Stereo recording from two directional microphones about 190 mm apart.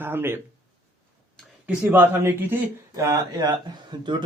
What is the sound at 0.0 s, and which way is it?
Speech, 10° right (ahead or behind).